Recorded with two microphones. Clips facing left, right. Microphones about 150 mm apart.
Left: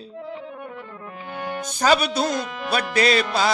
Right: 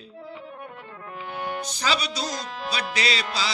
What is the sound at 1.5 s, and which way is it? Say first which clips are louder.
Speech: left 9 dB; 50° left (ahead or behind).